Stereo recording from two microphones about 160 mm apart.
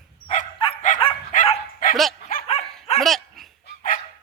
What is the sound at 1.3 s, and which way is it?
Dog, 50° left (ahead or behind).